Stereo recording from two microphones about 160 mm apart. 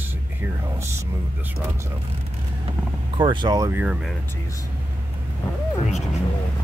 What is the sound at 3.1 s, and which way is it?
Speech, 30° right (ahead or behind).